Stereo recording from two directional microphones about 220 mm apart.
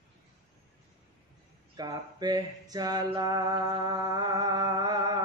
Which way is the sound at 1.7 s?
20° right (ahead or behind).